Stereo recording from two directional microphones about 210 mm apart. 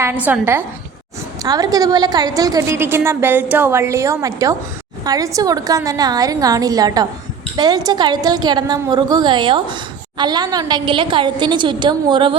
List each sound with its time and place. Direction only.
0.0 s a woman's voice: 10° right (ahead or behind)